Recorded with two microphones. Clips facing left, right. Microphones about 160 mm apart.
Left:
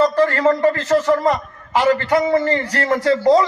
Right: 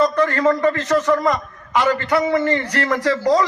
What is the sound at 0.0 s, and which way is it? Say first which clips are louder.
A man's voice: left 2 dB; 30° left (ahead or behind).